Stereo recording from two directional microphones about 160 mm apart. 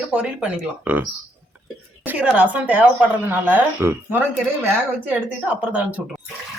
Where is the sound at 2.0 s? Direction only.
10° right (ahead or behind).